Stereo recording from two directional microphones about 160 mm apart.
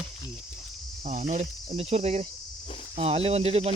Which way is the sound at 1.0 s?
50° right (ahead or behind).